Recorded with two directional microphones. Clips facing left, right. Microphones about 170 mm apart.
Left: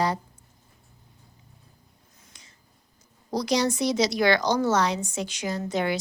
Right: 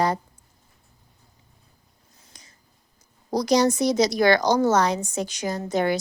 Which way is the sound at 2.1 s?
35° right (ahead or behind).